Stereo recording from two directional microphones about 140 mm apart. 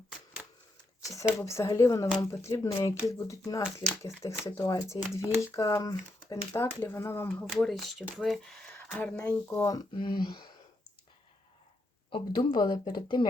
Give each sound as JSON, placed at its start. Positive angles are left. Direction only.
{"t": 1.4, "sound": "speech", "side_deg": 20}
{"t": 7.4, "sound": "speech", "side_deg": 5}
{"t": 9.6, "sound": "speech", "side_deg": 30}
{"t": 12.1, "sound": "speech", "side_deg": 30}